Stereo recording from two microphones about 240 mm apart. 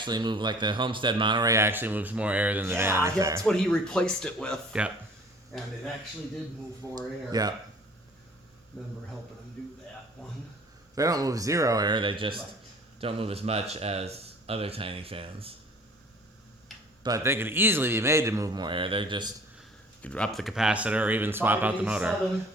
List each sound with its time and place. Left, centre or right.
0.0 s speech: centre
3.4 s speech: centre
6.9 s speech: centre
10.9 s speech: centre
17.0 s speech: centre
20.0 s speech: centre